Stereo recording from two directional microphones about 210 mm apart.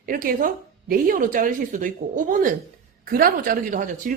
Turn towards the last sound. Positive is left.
turn(degrees=-40)  # may be behind; listen again after turning